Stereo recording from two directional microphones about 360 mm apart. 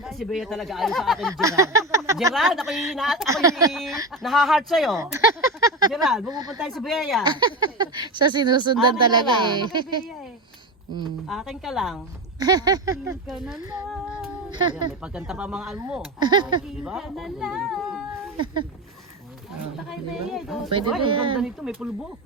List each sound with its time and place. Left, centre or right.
0.0 s speech: centre
6.2 s speech: centre
6.6 s speech: centre
7.3 s speech: centre
11.3 s speech: centre
12.4 s speech: centre
13.7 s speech: centre
15.0 s speech: centre
16.6 s speech: centre
19.9 s speech: centre
21.0 s speech: centre
21.3 s speech: centre